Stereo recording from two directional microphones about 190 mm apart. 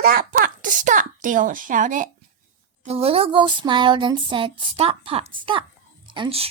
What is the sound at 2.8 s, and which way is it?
Speech, 30° right (ahead or behind).